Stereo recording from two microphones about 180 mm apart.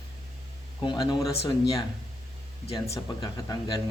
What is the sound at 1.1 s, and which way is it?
Speech, 20° left (ahead or behind).